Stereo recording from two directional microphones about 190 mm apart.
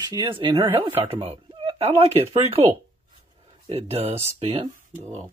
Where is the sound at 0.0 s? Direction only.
20° right (ahead or behind).